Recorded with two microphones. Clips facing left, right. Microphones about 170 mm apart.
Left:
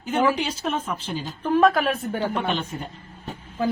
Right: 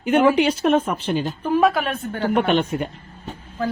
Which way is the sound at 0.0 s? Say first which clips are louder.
Right 6 dB; 65° right (ahead or behind).